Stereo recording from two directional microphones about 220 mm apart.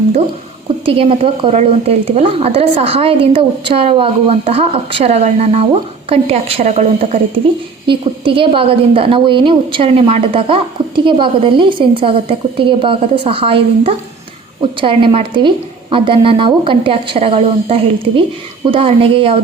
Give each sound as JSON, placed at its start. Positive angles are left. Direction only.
{"t": 0.9, "sound": "a woman's voice", "side_deg": -25}